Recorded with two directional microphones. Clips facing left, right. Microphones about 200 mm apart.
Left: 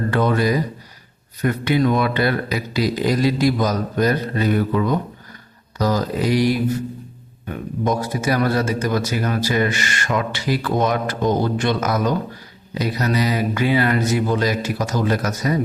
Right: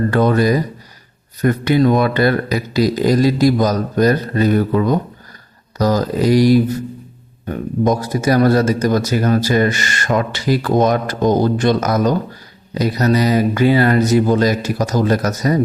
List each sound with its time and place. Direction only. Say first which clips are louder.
0.1 s a man's voice: right 2 dB; 40° right (ahead or behind)